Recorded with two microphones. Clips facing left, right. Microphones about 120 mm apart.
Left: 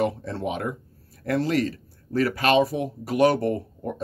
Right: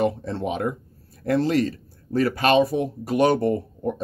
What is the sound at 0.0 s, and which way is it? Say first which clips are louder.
Speech: right 2 dB; 25° right (ahead or behind).